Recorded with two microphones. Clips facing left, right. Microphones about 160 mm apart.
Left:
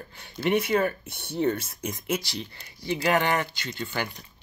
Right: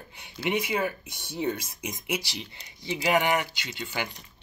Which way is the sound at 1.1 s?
55° left (ahead or behind).